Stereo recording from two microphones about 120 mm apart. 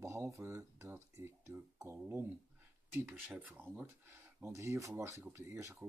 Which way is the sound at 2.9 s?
20° right (ahead or behind).